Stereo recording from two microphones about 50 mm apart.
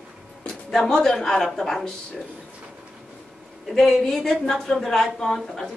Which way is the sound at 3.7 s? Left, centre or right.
Centre.